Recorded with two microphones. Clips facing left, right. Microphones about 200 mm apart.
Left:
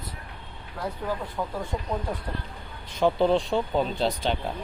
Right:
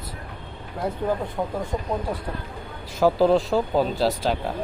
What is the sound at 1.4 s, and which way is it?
Speech, 35° right (ahead or behind).